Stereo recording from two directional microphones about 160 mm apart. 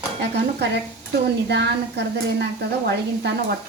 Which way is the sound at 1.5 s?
90° right.